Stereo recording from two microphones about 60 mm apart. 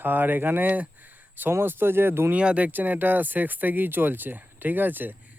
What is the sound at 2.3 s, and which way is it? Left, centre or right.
Speech, right.